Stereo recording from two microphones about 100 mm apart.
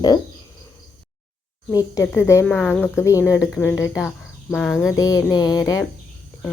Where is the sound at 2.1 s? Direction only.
30° left (ahead or behind).